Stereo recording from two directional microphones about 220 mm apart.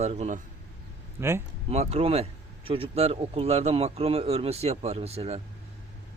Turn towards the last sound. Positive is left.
turn(degrees=-30)  # may be behind; listen again after turning